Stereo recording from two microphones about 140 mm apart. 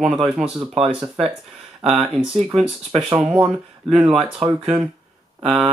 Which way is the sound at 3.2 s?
5° right (ahead or behind).